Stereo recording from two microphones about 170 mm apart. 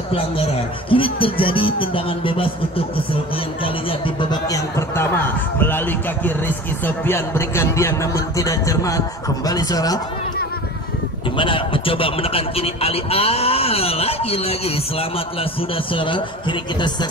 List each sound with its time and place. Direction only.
0.1 s a man's voice: 30° left (ahead or behind)
3.6 s a man's voice: 30° left (ahead or behind)
11.3 s a man's voice: 30° left (ahead or behind)